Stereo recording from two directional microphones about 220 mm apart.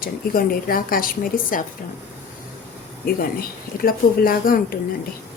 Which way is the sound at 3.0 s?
40° left (ahead or behind).